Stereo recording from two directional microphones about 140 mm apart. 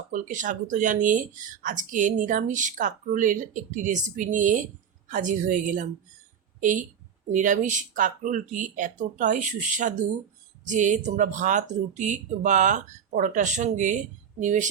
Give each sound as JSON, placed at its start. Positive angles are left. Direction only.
{"t": 0.1, "sound": "a woman's voice", "side_deg": -70}